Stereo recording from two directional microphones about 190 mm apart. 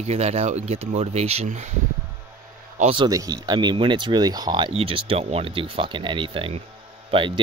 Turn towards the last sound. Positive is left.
turn(degrees=-30)  # may be behind; listen again after turning